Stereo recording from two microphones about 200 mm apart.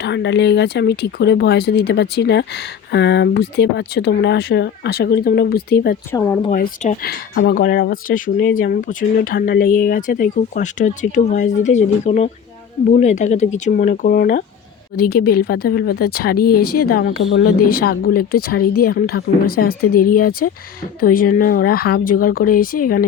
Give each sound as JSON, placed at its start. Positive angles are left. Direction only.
{"t": 0.0, "sound": "speech", "side_deg": 60}
{"t": 6.1, "sound": "speech", "side_deg": 10}
{"t": 6.5, "sound": "speech", "side_deg": 45}